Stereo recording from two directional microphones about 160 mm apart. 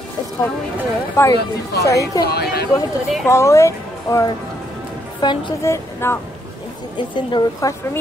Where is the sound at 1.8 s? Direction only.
20° left (ahead or behind).